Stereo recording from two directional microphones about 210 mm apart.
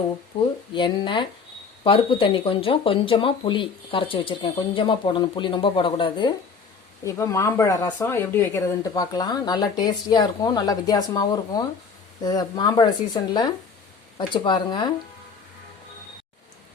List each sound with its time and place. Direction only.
0.3 s speech: 25° left (ahead or behind)